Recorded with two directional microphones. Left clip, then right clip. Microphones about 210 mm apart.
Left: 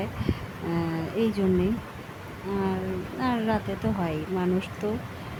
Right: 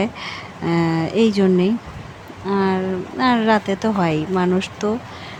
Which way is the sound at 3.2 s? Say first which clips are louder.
Right 11 dB; 15° right (ahead or behind).